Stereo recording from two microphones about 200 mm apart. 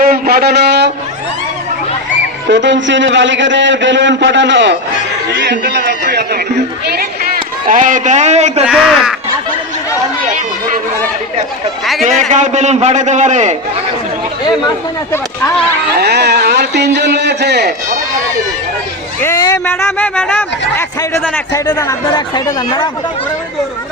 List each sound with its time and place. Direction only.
0.0 s a sound: 50° right (ahead or behind)
2.5 s a man's voice: 65° right (ahead or behind); by 8.6 s 35° right (ahead or behind)
8.6 s speech: 5° right (ahead or behind)
12.3 s a man's voice: 35° right (ahead or behind)
16.0 s a sound: 55° right (ahead or behind)
19.2 s speech: 15° left (ahead or behind)